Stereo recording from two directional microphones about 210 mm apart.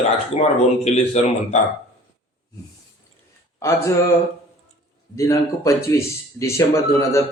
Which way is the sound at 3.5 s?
15° left (ahead or behind).